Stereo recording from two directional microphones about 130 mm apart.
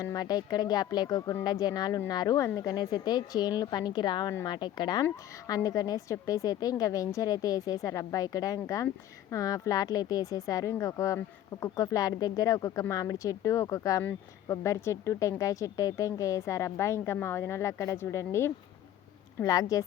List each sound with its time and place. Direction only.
0.0 s speech: 30° left (ahead or behind)